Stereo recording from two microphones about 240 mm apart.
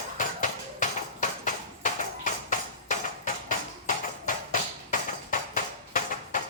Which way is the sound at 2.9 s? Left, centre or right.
Left.